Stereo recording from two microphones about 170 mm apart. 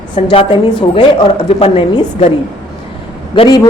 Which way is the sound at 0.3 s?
35° left (ahead or behind).